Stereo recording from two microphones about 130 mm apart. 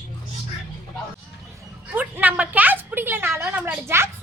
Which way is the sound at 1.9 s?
15° right (ahead or behind).